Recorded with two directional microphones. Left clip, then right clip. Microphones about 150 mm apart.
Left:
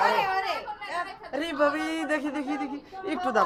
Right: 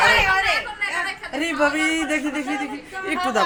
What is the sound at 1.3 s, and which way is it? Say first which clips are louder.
Speech: right 4 dB; 10° right (ahead or behind).